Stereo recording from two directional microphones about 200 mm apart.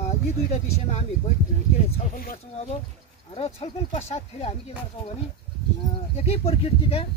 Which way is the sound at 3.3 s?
30° left (ahead or behind).